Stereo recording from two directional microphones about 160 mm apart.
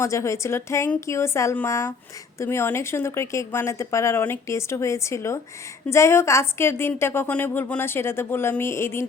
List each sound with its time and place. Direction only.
0.0 s a woman's voice: 20° left (ahead or behind)